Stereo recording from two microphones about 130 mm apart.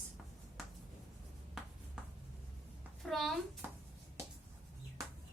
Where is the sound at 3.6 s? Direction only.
15° right (ahead or behind).